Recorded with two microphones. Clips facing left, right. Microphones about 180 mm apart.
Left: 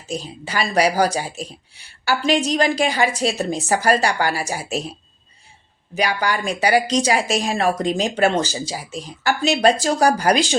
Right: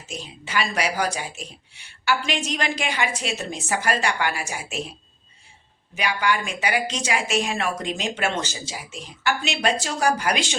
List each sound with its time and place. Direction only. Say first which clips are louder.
0.1 s a woman's voice: left 3 dB; 35° left (ahead or behind)
5.9 s a woman's voice: left 3 dB; 40° left (ahead or behind)